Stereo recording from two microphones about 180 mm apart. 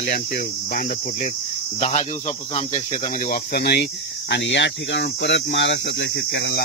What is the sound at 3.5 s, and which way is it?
Speech, 65° left (ahead or behind).